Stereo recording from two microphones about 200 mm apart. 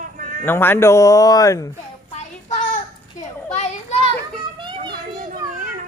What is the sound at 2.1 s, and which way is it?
Child singing, 40° left (ahead or behind).